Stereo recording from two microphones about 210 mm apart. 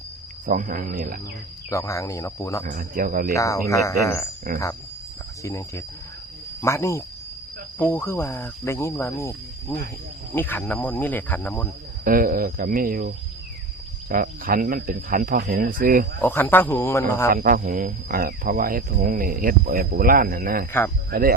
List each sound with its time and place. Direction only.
0.4 s speech: 40° right (ahead or behind)
1.7 s speech: 15° left (ahead or behind)
2.6 s speech: 40° right (ahead or behind)
3.3 s speech: 15° left (ahead or behind)
4.5 s speech: 45° right (ahead or behind)
5.4 s speech: 15° left (ahead or behind)
12.0 s speech: 45° right (ahead or behind)
16.2 s speech: 10° left (ahead or behind)
17.3 s speech: 40° right (ahead or behind)